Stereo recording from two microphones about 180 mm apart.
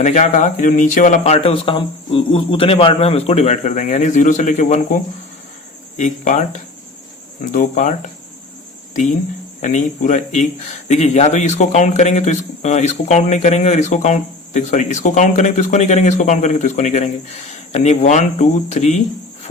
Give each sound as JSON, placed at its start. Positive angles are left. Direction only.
{"t": 0.0, "sound": "speech", "side_deg": 40}
{"t": 6.0, "sound": "speech", "side_deg": 45}
{"t": 9.6, "sound": "speech", "side_deg": 45}